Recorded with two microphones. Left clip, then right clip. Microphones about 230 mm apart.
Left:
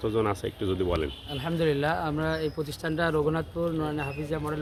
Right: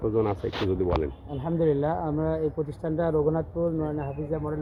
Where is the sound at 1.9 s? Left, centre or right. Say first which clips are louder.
Right 1 dB; centre.